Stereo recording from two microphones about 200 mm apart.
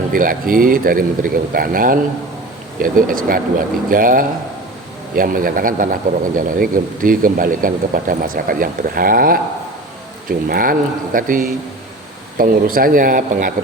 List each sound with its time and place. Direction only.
0.1 s speech: 45° right (ahead or behind)